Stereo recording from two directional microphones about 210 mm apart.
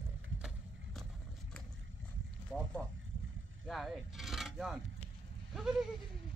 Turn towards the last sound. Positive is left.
turn(degrees=0)  # may be behind; listen again after turning